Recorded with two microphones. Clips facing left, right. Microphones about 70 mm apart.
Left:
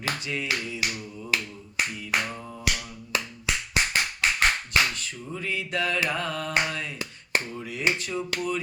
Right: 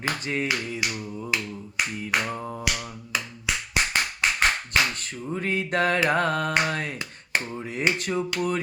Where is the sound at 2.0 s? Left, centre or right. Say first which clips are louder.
Right 2 dB; right.